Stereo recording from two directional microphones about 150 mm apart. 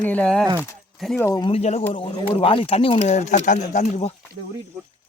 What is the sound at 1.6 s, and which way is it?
Speech, 45° left (ahead or behind).